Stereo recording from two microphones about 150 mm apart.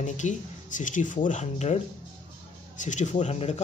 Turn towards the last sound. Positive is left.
turn(degrees=45)  # may be behind; listen again after turning